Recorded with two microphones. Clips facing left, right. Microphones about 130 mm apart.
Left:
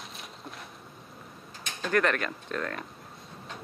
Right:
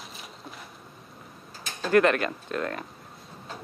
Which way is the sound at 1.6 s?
35° right (ahead or behind).